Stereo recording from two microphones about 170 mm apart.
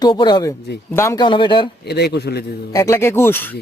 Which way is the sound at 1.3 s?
30° left (ahead or behind).